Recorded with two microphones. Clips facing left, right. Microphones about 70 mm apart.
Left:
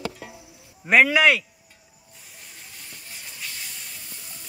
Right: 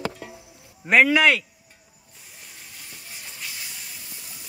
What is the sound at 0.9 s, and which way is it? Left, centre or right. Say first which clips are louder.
Speech: even; centre.